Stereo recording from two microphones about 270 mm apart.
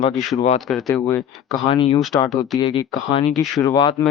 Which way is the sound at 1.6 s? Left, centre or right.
Centre.